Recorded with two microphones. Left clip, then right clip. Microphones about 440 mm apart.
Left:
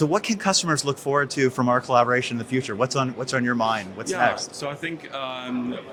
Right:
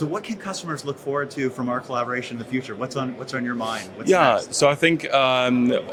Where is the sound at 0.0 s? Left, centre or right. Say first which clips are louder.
Left 6 dB; left.